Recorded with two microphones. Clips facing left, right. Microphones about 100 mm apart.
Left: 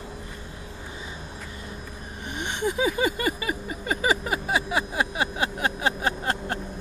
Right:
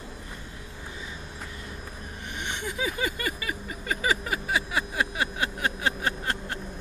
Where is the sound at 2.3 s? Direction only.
20° left (ahead or behind).